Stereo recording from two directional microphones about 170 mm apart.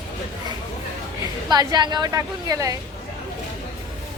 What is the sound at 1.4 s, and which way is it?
A woman's voice, 25° right (ahead or behind).